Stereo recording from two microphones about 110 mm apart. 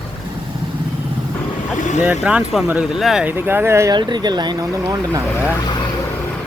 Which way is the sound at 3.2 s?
20° right (ahead or behind).